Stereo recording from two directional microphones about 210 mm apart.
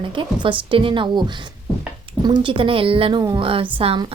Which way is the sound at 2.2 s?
20° right (ahead or behind).